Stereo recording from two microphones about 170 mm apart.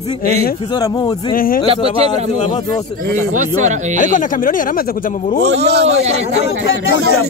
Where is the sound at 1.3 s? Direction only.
60° left (ahead or behind).